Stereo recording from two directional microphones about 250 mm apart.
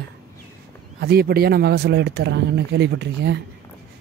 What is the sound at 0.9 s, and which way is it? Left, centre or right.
Speech, right.